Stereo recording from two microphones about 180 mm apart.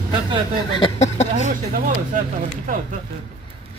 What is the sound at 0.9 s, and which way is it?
Speech, 40° left (ahead or behind).